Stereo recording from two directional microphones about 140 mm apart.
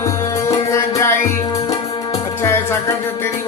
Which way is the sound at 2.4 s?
20° left (ahead or behind).